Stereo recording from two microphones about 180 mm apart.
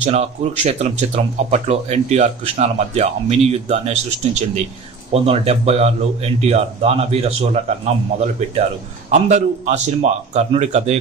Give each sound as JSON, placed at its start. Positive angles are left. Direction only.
{"t": 0.0, "sound": "speech", "side_deg": -35}
{"t": 9.1, "sound": "speech", "side_deg": -40}